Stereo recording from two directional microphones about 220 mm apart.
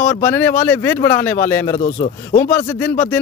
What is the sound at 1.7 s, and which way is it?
Speech, 35° left (ahead or behind).